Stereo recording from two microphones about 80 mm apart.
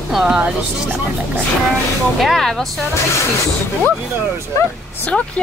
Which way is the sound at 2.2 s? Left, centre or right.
Centre.